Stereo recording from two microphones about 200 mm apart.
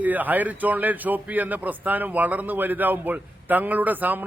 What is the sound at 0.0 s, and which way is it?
A man's voice, 10° right (ahead or behind).